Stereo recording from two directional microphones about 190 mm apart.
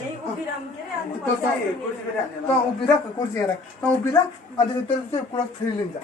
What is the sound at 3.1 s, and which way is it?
Speech, 20° left (ahead or behind).